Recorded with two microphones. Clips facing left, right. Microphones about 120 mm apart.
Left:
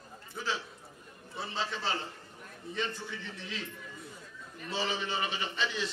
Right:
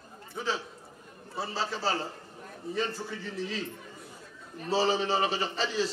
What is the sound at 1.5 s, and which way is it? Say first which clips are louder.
A man's voice: right 3 dB; 35° right (ahead or behind).